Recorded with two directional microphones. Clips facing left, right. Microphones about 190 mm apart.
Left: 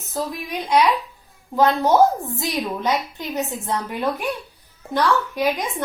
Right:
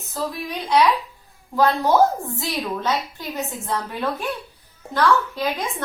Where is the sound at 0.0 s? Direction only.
20° left (ahead or behind).